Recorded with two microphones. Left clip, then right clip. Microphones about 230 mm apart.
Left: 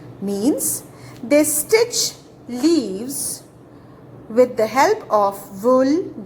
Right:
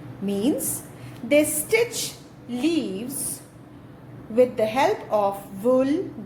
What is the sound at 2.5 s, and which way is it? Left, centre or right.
Speech, left.